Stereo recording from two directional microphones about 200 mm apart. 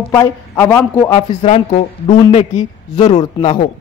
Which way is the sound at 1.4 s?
35° left (ahead or behind).